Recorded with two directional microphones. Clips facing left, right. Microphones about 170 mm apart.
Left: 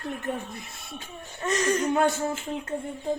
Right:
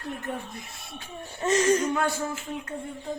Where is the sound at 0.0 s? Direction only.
20° left (ahead or behind).